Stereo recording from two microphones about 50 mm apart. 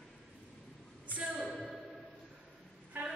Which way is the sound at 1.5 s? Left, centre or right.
Centre.